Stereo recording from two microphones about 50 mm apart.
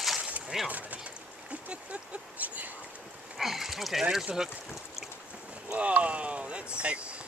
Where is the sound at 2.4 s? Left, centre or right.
Right.